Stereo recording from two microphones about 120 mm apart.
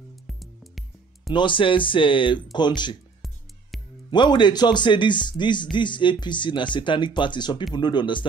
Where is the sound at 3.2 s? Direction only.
Centre (ahead or behind).